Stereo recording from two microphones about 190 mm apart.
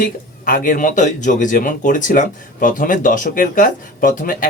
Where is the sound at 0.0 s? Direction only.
50° left (ahead or behind).